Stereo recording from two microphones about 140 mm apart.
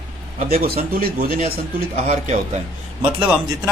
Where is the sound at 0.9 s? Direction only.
90° right.